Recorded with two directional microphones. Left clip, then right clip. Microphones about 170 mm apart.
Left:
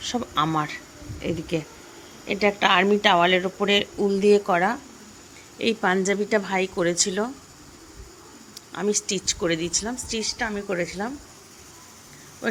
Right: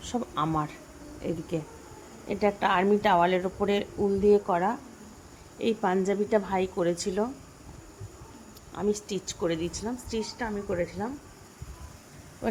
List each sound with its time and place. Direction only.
0.1 s a woman's voice: centre (ahead or behind)
8.7 s a woman's voice: centre (ahead or behind)